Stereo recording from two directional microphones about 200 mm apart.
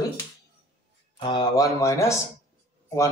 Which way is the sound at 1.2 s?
20° left (ahead or behind).